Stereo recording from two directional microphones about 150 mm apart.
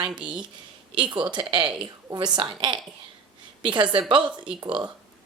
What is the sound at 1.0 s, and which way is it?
A woman's voice, 30° right (ahead or behind).